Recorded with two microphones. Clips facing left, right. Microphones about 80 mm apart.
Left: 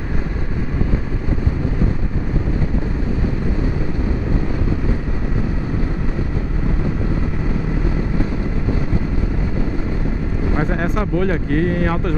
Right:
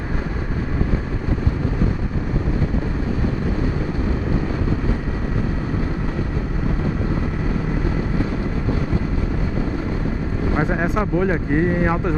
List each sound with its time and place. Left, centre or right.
10.5 s speech: centre